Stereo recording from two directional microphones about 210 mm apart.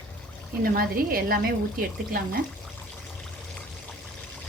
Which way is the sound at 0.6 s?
45° right (ahead or behind).